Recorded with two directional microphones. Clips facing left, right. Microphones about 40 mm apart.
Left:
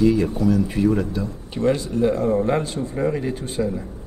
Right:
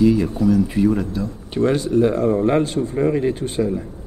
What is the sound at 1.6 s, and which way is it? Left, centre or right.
Speech, right.